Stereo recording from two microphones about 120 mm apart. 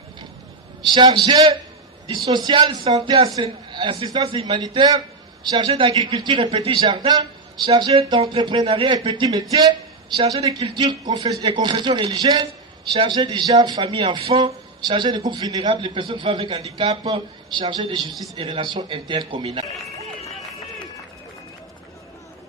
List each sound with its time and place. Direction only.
0.9 s a man's voice: 35° right (ahead or behind)
7.9 s speech: 45° right (ahead or behind)
17.0 s a man's voice: 40° right (ahead or behind)